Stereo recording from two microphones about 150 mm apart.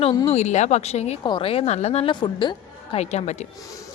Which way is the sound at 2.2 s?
30° left (ahead or behind).